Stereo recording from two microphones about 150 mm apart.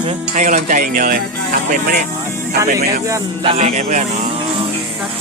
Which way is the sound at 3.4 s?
45° right (ahead or behind).